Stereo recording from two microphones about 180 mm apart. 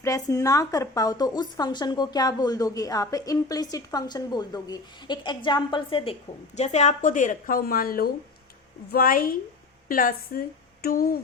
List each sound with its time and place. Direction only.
0.0 s a woman's voice: 15° left (ahead or behind)
6.6 s speech: 40° left (ahead or behind); by 11.2 s 55° left (ahead or behind)